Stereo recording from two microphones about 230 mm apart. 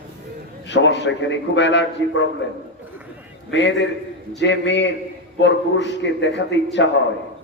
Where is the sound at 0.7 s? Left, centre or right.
Left.